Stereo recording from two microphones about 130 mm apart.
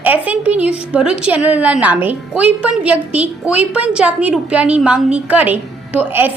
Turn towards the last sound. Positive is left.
turn(degrees=-15)  # may be behind; listen again after turning